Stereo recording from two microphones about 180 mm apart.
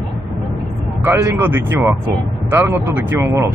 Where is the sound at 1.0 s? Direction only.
15° right (ahead or behind).